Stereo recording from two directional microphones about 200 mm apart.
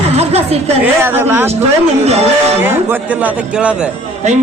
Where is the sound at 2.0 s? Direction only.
30° right (ahead or behind).